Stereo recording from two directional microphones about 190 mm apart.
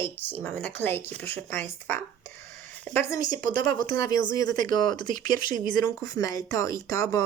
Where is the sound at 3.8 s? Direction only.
20° left (ahead or behind).